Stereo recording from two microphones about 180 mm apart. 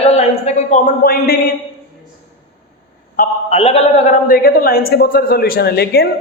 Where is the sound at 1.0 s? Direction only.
55° left (ahead or behind).